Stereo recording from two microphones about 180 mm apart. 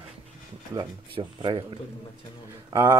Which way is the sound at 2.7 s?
15° right (ahead or behind).